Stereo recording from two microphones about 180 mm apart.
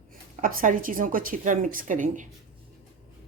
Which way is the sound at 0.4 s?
50° right (ahead or behind).